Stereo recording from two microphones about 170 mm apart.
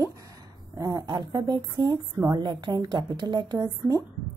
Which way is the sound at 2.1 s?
15° right (ahead or behind).